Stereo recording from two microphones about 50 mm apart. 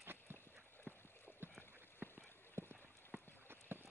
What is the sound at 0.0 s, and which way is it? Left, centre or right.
Clip-clop, right.